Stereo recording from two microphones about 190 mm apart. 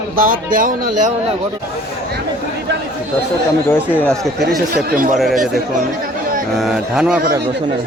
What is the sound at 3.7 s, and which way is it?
Speech, 5° left (ahead or behind).